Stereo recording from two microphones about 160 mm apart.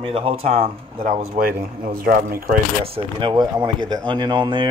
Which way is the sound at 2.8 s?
35° right (ahead or behind).